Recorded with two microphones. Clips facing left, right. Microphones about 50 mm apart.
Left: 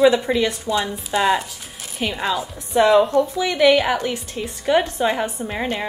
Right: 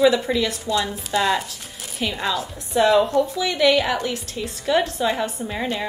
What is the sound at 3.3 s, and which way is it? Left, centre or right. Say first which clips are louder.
A woman's voice: left 4 dB; centre.